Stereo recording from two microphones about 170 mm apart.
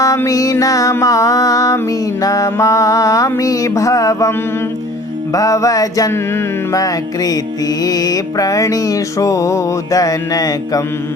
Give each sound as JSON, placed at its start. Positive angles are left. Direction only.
{"t": 0.0, "sound": "music", "side_deg": 20}